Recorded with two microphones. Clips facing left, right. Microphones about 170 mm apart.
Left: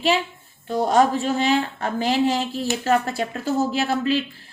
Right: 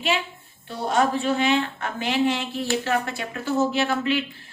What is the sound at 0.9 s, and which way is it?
A woman's voice, 40° left (ahead or behind).